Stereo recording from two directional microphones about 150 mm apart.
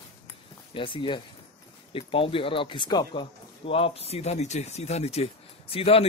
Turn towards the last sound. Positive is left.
turn(degrees=40)  # may be behind; listen again after turning